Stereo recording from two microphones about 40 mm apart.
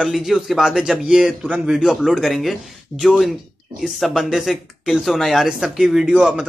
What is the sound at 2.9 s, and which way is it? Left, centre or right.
Speech, left.